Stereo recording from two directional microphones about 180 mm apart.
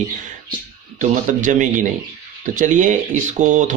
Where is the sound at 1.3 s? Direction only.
45° right (ahead or behind).